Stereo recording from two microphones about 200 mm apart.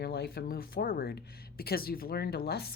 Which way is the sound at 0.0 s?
50° left (ahead or behind).